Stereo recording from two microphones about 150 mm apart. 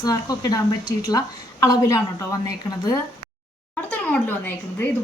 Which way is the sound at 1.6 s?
25° left (ahead or behind).